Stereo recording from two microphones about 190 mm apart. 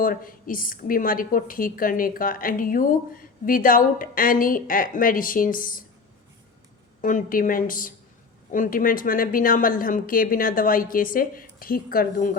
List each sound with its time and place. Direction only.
0.0 s a woman's voice: 45° left (ahead or behind)
7.0 s a woman's voice: 45° left (ahead or behind)